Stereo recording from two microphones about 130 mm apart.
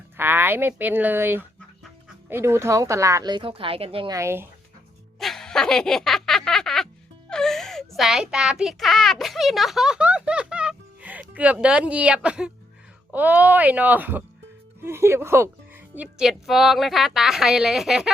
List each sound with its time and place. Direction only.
0.2 s speech: 15° right (ahead or behind)
3.3 s speech: 45° right (ahead or behind)
4.1 s speech: 20° right (ahead or behind)
5.2 s a sound: centre (ahead or behind)
7.3 s a child's voice: 5° left (ahead or behind)